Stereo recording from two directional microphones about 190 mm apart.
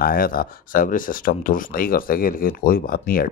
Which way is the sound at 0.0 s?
50° left (ahead or behind).